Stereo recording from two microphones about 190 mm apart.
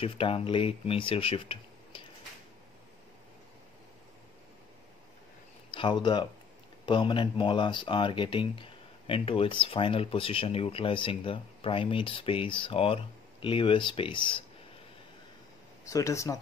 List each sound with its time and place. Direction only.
0.0 s speech: 30° left (ahead or behind)
5.7 s speech: 25° left (ahead or behind)
15.8 s speech: 15° left (ahead or behind)